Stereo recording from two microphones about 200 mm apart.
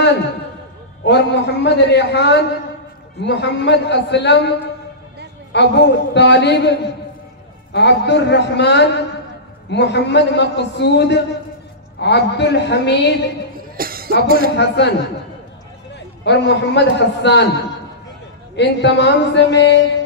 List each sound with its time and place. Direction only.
1.0 s a man's voice: 60° left (ahead or behind)
13.7 s music: 50° right (ahead or behind)
14.2 s a man's voice: 50° right (ahead or behind)
14.6 s a man's voice: 60° left (ahead or behind)
18.6 s a man's voice: 60° left (ahead or behind)